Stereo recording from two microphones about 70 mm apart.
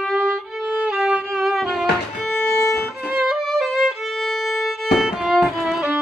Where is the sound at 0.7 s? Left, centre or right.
Centre.